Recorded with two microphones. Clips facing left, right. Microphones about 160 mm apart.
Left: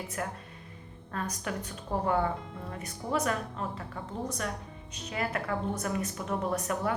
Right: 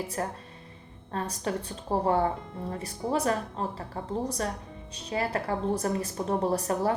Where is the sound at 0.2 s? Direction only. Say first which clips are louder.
Right 3 dB; 35° right (ahead or behind).